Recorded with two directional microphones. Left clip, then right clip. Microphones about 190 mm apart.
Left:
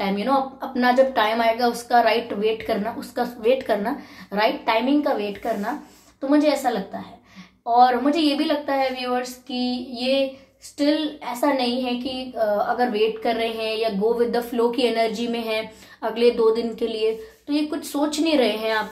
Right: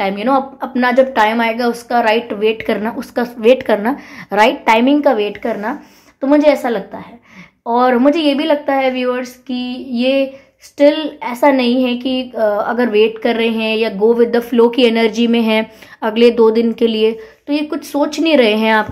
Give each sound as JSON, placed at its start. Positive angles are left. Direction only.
{"t": 0.0, "sound": "a woman's voice", "side_deg": -40}
{"t": 7.7, "sound": "a woman's voice", "side_deg": -50}